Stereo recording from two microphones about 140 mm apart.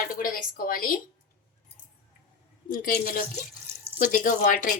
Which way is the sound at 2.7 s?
90° left.